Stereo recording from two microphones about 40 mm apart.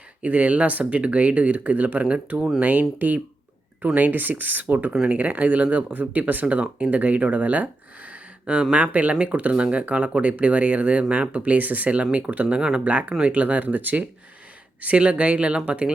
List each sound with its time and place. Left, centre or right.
0.2 s speech: right
5.0 s speech: right
6.4 s speech: right
12.5 s speech: right
12.9 s speech: right
14.8 s speech: right